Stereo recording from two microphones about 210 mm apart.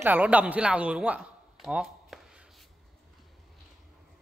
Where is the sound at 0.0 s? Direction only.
5° right (ahead or behind).